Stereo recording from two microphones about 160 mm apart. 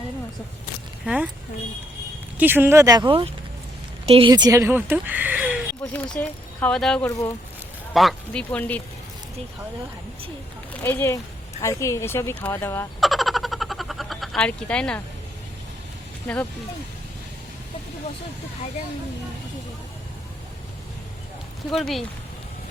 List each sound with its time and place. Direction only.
1.0 s speech: 5° right (ahead or behind)
2.4 s speech: 10° right (ahead or behind); by 4.3 s 40° right (ahead or behind)
4.3 s speech: 25° right (ahead or behind)
5.8 s speech: 10° left (ahead or behind)
7.1 s speech: 20° left (ahead or behind)
7.9 s speech: 5° left (ahead or behind)
10.8 s speech: 15° left (ahead or behind)
13.0 s a sound: centre (ahead or behind)
16.2 s speech: 10° left (ahead or behind)
21.7 s speech: centre (ahead or behind)